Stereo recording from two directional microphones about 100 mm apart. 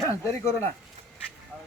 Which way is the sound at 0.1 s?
25° left (ahead or behind).